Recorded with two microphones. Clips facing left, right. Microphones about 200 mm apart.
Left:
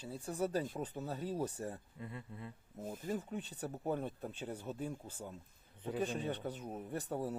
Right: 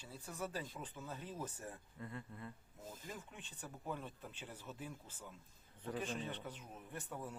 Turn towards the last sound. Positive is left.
turn(degrees=35)  # may be behind; listen again after turning